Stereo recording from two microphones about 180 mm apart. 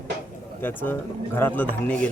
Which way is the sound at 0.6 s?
10° left (ahead or behind).